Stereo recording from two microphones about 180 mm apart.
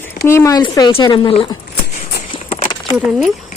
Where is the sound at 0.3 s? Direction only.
15° left (ahead or behind).